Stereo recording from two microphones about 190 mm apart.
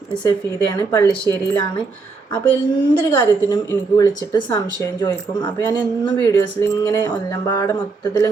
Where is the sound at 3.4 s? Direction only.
20° left (ahead or behind).